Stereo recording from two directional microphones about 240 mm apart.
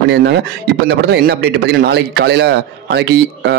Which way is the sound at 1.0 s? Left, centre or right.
Right.